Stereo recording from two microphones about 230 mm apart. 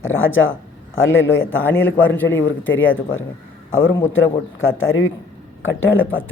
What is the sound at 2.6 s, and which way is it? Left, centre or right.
A man's voice, left.